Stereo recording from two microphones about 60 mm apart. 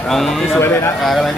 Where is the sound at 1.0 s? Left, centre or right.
Centre.